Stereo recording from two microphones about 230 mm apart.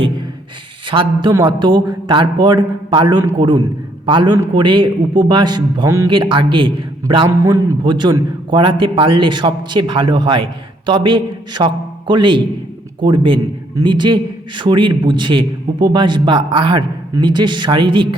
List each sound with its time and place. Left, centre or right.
0.9 s a man's voice: right